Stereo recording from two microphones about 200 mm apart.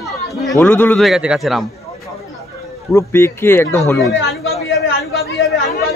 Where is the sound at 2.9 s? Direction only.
15° left (ahead or behind).